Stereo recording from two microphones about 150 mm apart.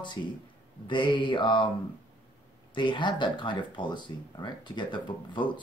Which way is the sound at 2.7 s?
30° left (ahead or behind).